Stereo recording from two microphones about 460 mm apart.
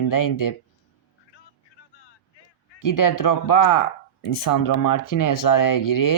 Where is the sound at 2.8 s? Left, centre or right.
Left.